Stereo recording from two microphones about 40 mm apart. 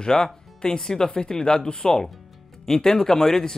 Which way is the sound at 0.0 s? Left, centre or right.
Centre.